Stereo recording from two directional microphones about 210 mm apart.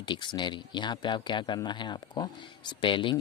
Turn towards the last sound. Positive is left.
turn(degrees=25)  # may be behind; listen again after turning